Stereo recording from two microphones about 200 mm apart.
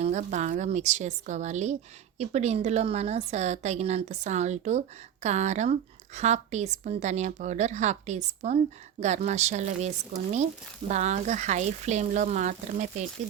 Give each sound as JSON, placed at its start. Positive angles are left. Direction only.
{"t": 0.0, "sound": "speech", "side_deg": -35}